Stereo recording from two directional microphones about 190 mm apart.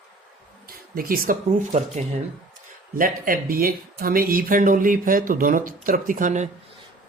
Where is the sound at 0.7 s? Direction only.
50° right (ahead or behind).